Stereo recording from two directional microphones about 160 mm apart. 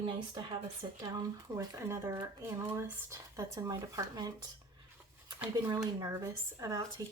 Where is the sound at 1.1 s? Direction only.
20° right (ahead or behind).